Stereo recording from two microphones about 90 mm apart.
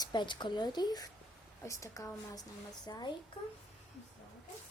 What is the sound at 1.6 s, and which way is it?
A woman's voice, 35° left (ahead or behind).